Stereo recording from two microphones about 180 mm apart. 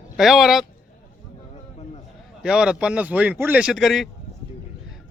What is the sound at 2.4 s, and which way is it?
Speech, 5° right (ahead or behind).